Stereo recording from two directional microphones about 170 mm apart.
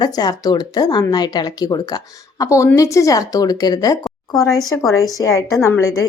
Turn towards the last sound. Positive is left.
turn(degrees=20)  # may be behind; listen again after turning